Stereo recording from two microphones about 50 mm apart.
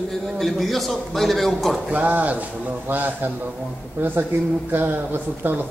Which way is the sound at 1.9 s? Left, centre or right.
Right.